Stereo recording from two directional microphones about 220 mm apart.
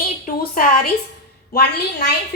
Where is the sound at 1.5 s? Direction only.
45° left (ahead or behind).